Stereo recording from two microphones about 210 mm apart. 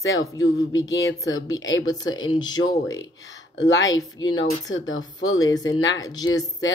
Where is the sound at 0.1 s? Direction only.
15° left (ahead or behind).